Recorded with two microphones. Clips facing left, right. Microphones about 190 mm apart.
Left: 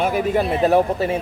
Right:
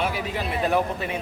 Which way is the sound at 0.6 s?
35° left (ahead or behind).